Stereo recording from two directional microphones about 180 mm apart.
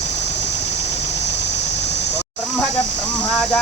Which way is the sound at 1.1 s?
75° left (ahead or behind).